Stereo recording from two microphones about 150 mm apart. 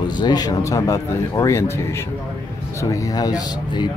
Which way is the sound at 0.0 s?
30° left (ahead or behind).